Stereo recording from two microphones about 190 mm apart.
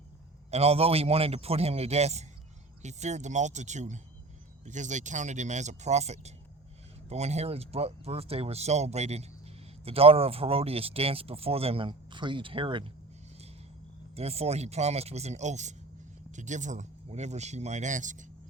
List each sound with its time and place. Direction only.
0.5 s speech: 35° right (ahead or behind)
14.2 s speech: 35° right (ahead or behind)